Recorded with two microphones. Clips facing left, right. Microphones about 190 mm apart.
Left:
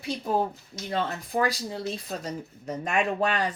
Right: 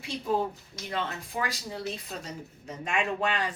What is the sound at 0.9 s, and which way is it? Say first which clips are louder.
Speech: left 5 dB; 35° left (ahead or behind).